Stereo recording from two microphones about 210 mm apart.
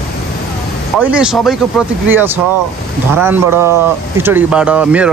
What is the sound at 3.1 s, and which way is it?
Speech, 10° right (ahead or behind).